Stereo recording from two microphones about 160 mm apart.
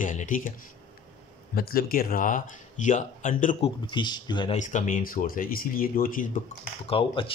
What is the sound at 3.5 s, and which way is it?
Speech, 30° left (ahead or behind).